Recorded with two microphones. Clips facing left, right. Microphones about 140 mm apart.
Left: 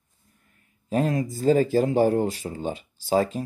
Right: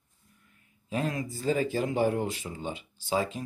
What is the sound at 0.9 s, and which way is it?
Speech, 40° left (ahead or behind).